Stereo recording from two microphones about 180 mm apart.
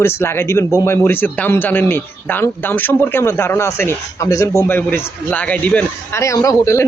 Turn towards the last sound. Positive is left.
turn(degrees=15)  # may be behind; listen again after turning